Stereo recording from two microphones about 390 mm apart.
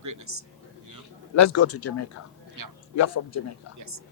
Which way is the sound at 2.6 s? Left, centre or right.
Right.